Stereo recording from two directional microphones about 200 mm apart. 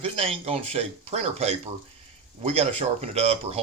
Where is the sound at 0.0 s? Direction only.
30° right (ahead or behind).